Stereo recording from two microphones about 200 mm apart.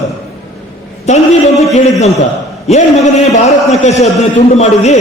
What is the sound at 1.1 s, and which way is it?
Speech, 35° left (ahead or behind).